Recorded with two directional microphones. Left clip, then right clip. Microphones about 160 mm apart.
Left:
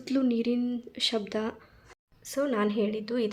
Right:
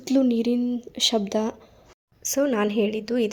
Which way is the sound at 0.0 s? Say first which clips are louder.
Right 6 dB; 20° right (ahead or behind).